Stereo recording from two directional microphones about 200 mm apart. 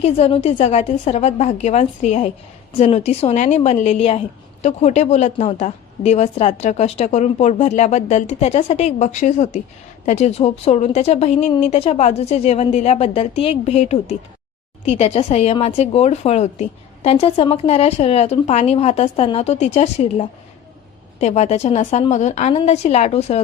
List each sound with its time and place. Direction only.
0.0 s a woman's voice: 30° left (ahead or behind)